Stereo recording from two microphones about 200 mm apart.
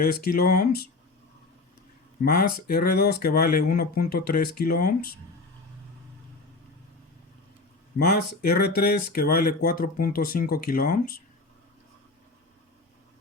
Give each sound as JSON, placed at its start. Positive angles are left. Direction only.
{"t": 0.0, "sound": "speech", "side_deg": 50}
{"t": 2.2, "sound": "speech", "side_deg": 50}
{"t": 7.9, "sound": "speech", "side_deg": 50}